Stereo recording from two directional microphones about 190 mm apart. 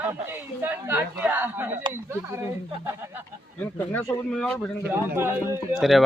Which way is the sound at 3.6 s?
10° left (ahead or behind).